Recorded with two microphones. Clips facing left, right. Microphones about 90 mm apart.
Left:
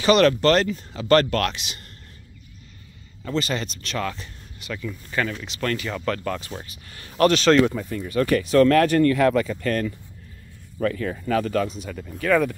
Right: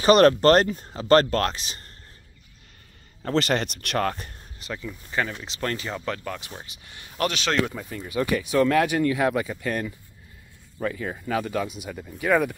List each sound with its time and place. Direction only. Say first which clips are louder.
0.0 s speech: right 1 dB; 40° right (ahead or behind)
3.2 s speech: right 2 dB; 60° right (ahead or behind)
4.8 s speech: left 2 dB; 15° right (ahead or behind)
5.4 s speech: left 3 dB; 25° right (ahead or behind)